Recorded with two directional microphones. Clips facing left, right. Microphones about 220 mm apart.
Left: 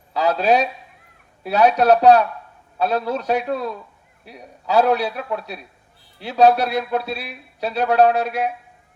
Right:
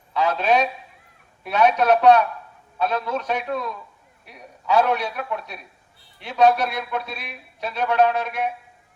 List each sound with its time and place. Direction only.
0.1 s a man's voice: 35° left (ahead or behind)